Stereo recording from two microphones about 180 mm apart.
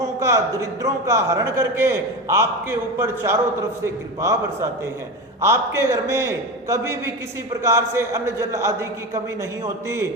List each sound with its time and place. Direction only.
0.2 s a man's voice: 15° right (ahead or behind)